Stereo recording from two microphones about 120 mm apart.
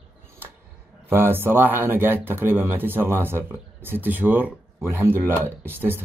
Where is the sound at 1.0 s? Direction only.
20° right (ahead or behind).